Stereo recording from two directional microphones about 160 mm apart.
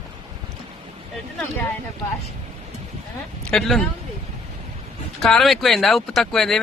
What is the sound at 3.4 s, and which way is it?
Speech, 5° left (ahead or behind).